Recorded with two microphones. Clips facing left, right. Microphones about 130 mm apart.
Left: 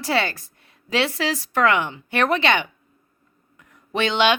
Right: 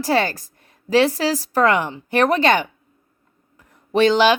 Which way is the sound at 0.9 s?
40° right (ahead or behind).